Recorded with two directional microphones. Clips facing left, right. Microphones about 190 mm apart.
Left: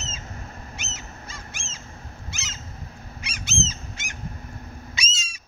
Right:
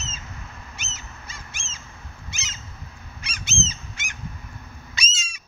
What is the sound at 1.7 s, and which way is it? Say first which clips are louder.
Bird: left 2 dB; 35° left (ahead or behind).